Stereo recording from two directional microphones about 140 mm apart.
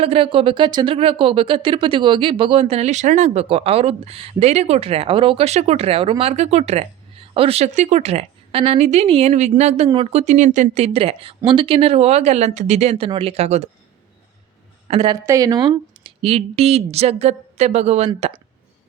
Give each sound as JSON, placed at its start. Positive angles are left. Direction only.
{"t": 0.0, "sound": "speech", "side_deg": -45}
{"t": 14.8, "sound": "a woman's voice", "side_deg": -50}
{"t": 15.1, "sound": "speech", "side_deg": -30}